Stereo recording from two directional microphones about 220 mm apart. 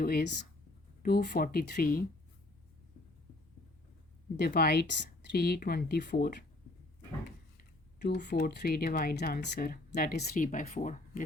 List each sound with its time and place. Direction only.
0.0 s speech: 45° left (ahead or behind)
4.4 s speech: 45° left (ahead or behind)
7.9 s speech: 50° left (ahead or behind)